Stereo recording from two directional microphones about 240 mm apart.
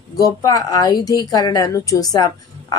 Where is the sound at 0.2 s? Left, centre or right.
Centre.